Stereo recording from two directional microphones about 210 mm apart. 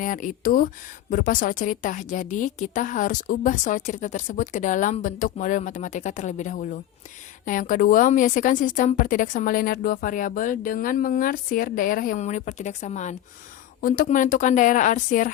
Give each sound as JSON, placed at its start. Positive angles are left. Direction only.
{"t": 0.0, "sound": "a woman's voice", "side_deg": 40}